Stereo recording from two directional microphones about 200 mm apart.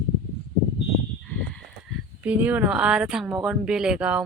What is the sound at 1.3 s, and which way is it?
Horse, 5° left (ahead or behind).